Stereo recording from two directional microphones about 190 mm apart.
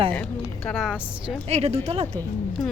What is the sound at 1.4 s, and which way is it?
Speech, 35° right (ahead or behind).